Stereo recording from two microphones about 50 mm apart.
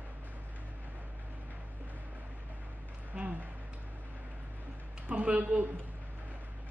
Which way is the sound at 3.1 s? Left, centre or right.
Right.